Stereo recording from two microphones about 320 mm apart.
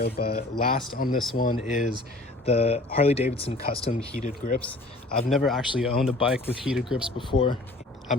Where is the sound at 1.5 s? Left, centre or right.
Centre.